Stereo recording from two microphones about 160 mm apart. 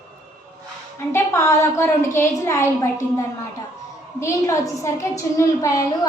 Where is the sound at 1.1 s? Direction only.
20° left (ahead or behind).